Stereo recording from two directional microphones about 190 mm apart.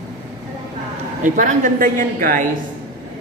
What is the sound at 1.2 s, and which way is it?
A woman's voice, 40° right (ahead or behind).